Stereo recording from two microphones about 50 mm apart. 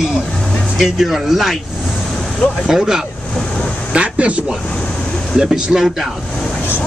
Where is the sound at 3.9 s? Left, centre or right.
Right.